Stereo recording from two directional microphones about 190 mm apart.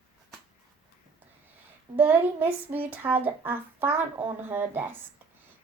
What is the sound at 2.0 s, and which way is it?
Speech, 10° right (ahead or behind).